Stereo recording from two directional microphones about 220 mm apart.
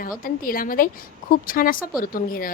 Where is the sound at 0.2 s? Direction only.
40° left (ahead or behind).